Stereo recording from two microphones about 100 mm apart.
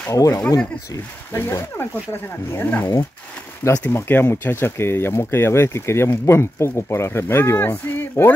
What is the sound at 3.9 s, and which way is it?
Speech, 20° left (ahead or behind).